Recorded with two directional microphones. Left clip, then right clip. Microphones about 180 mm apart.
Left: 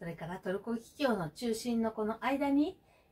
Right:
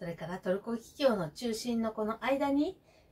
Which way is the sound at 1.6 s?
15° right (ahead or behind).